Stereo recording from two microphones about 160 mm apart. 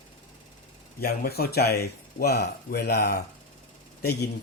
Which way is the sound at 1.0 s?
70° left (ahead or behind).